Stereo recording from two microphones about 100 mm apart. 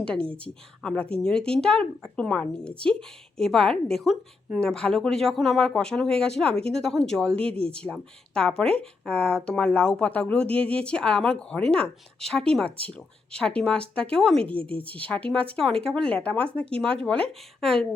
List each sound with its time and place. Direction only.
0.0 s speech: 10° left (ahead or behind)